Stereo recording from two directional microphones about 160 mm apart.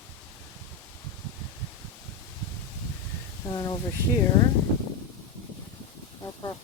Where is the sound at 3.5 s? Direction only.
25° left (ahead or behind).